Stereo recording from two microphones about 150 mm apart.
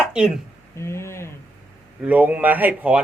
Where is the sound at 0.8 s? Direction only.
20° left (ahead or behind).